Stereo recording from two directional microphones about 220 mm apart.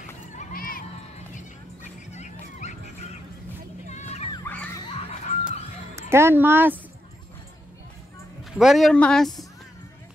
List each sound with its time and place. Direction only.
0.3 s a sound: 40° left (ahead or behind)
1.3 s music: 35° left (ahead or behind)
4.3 s music: 10° left (ahead or behind)
4.9 s a sound: 30° left (ahead or behind)
5.9 s speech: 10° right (ahead or behind)
8.5 s speech: centre (ahead or behind)